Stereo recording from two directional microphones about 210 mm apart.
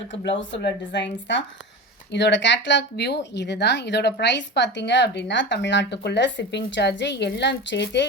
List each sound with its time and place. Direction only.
0.1 s speech: 60° left (ahead or behind)